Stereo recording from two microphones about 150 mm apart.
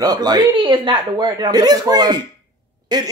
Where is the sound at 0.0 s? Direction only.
25° right (ahead or behind).